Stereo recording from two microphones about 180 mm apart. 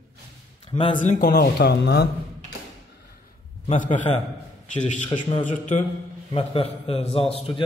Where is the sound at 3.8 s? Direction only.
45° left (ahead or behind).